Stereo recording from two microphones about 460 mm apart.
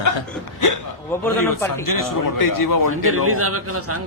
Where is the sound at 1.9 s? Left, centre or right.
Left.